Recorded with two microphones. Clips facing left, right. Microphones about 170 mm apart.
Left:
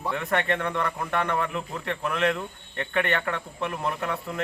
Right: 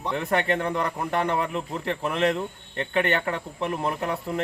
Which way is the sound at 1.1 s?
30° right (ahead or behind).